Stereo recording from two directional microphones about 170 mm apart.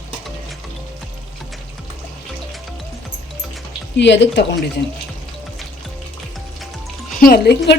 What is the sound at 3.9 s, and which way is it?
Speech, 90° left.